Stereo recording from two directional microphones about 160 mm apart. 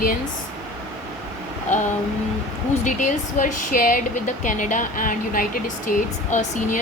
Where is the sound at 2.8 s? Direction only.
50° left (ahead or behind).